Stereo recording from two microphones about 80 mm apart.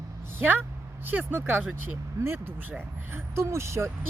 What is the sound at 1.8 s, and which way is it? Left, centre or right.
Speech, right.